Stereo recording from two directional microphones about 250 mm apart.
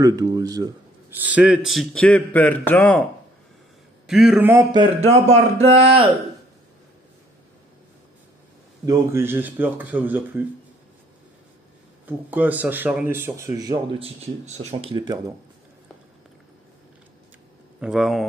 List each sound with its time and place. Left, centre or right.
0.0 s a man's voice: centre
4.1 s speech: centre; by 5.2 s right
5.3 s a sound: right
8.8 s speech: centre
12.1 s speech: centre
17.7 s speech: centre